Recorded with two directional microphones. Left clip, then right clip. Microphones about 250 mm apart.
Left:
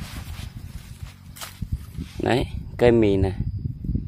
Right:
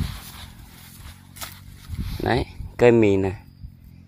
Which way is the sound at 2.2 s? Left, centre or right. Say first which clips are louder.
Left 1 dB; centre.